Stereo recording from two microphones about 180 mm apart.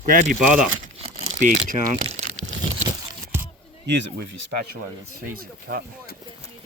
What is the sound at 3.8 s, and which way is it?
Speech, 75° right (ahead or behind).